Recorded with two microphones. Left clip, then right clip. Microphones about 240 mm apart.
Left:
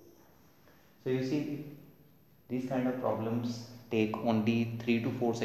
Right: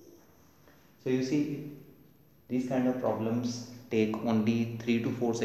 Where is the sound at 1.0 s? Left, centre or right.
Centre.